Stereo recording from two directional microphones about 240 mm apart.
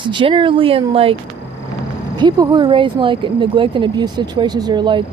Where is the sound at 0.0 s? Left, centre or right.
Right.